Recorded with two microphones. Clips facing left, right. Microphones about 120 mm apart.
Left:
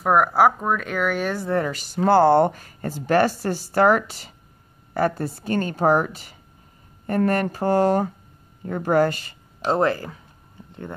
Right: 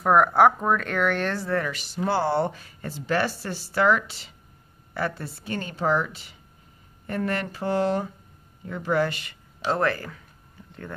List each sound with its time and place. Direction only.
0.0 s speech: 5° left (ahead or behind)
1.7 s speech: 40° left (ahead or behind)
9.7 s speech: 25° left (ahead or behind)